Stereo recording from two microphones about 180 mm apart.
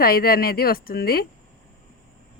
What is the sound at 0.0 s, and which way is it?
Speech, 55° left (ahead or behind).